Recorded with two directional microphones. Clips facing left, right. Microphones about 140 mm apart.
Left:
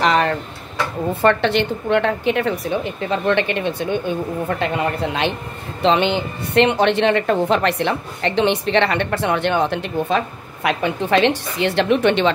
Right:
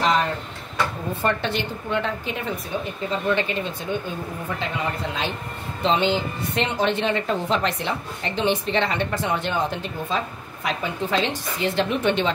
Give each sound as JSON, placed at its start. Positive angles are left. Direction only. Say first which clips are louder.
{"t": 0.0, "sound": "tick-tock", "louder": "left 4 dB", "side_deg": 75}
{"t": 1.2, "sound": "a woman's voice", "louder": "left 8 dB", "side_deg": 75}